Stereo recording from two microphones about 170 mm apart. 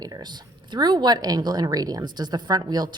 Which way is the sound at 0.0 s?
25° right (ahead or behind).